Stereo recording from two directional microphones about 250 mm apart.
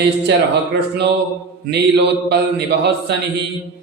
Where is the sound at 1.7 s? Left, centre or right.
Right.